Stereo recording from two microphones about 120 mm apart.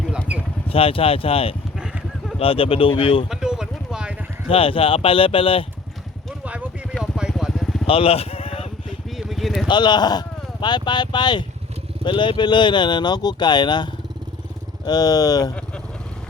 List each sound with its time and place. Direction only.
0.7 s speech: 50° left (ahead or behind)
1.8 s vehicle: 5° right (ahead or behind)
2.4 s speech: 50° left (ahead or behind)
3.2 s a sound: 5° right (ahead or behind)
4.4 s speech: 50° left (ahead or behind)
6.4 s a sound: 10° right (ahead or behind)
7.0 s vehicle: 5° right (ahead or behind)
7.9 s a sound: 50° left (ahead or behind)
9.0 s vehicle: centre (ahead or behind)
9.6 s speech: 40° left (ahead or behind)